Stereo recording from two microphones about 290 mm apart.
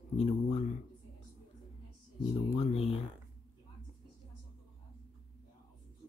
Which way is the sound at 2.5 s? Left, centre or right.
Left.